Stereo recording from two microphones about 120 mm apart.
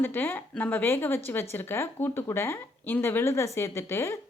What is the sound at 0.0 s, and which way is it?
Speech, 15° left (ahead or behind).